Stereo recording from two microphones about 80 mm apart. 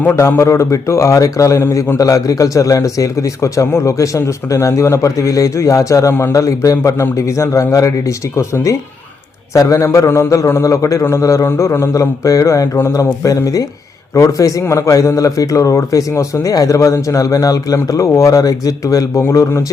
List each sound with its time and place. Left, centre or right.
0.2 s a man's voice: left
1.6 s a man's voice: left
2.0 s a man's voice: left